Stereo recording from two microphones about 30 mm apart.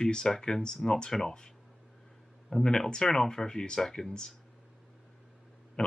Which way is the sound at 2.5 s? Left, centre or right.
Left.